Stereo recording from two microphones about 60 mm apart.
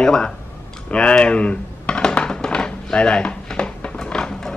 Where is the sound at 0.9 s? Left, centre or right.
Centre.